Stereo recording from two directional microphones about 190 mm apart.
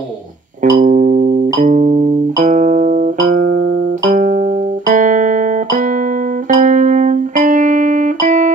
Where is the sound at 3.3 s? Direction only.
50° right (ahead or behind); by 3.9 s 65° right (ahead or behind).